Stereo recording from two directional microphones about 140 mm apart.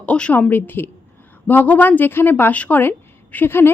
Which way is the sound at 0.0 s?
10° left (ahead or behind).